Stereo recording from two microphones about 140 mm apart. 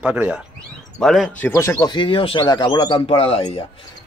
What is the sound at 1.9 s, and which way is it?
Speech, 35° left (ahead or behind).